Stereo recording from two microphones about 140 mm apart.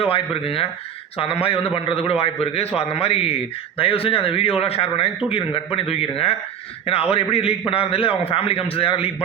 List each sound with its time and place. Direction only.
0.0 s a man's voice: 40° left (ahead or behind)